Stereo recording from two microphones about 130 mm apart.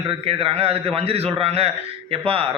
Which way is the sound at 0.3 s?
45° right (ahead or behind).